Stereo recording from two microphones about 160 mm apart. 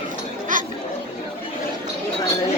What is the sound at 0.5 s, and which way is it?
Chatter, 55° right (ahead or behind).